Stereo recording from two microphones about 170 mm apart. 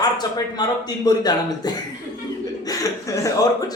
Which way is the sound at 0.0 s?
25° left (ahead or behind).